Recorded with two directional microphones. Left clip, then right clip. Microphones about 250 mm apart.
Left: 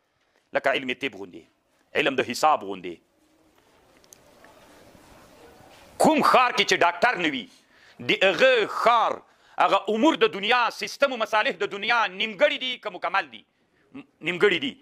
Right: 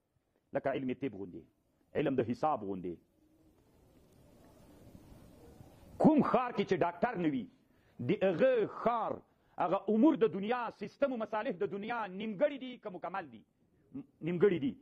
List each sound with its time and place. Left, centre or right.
0.6 s a man's voice: centre
4.4 s a sound: left
6.2 s a man's voice: centre